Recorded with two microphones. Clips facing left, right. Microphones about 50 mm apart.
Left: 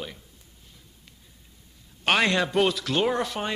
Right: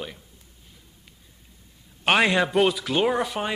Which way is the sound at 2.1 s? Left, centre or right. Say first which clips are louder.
Right 2 dB; centre.